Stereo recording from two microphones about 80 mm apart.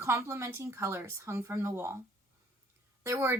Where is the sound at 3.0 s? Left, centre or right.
Right.